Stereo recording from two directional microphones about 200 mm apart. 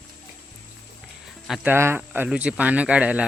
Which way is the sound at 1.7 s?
10° right (ahead or behind).